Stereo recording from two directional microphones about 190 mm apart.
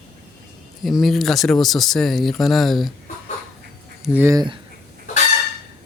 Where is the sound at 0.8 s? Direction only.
Centre (ahead or behind).